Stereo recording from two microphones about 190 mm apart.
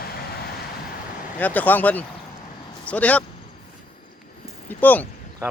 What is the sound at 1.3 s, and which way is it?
Speech, 10° left (ahead or behind).